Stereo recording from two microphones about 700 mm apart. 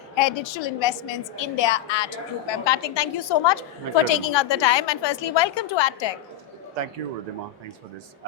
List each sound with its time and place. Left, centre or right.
0.2 s a woman's voice: left